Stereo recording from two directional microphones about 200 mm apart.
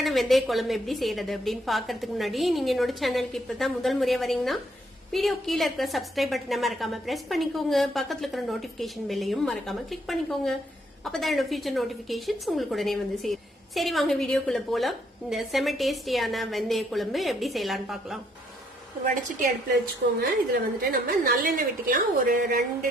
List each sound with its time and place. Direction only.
0.0 s a woman's voice: centre (ahead or behind)
20.5 s a woman's voice: 50° right (ahead or behind)